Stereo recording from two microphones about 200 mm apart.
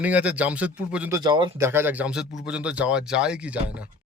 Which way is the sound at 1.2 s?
20° right (ahead or behind).